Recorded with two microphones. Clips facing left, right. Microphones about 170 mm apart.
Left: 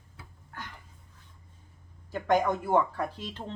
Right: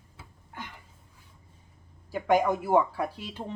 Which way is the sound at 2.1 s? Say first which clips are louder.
Right 2 dB; 10° right (ahead or behind).